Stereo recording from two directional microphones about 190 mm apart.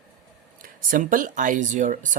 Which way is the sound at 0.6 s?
45° right (ahead or behind).